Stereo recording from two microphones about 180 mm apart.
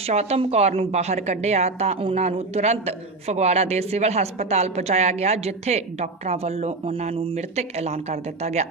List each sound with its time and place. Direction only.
0.0 s a woman's voice: 35° right (ahead or behind)